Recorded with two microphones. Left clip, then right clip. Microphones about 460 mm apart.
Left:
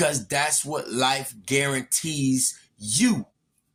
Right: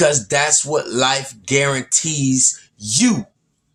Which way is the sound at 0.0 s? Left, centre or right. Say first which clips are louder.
Right 8 dB; left.